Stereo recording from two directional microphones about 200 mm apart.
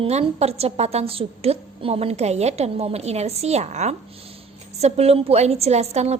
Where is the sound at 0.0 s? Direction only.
30° right (ahead or behind).